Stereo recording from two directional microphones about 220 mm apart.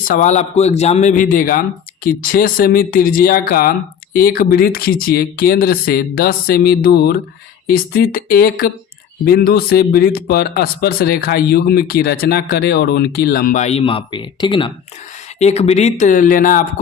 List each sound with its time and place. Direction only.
0.0 s speech: 35° left (ahead or behind)